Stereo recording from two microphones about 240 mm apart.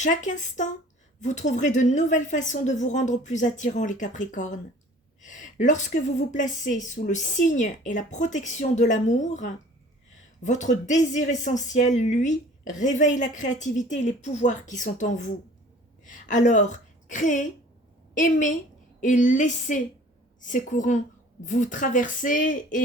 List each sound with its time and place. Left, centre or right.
0.0 s a woman's voice: left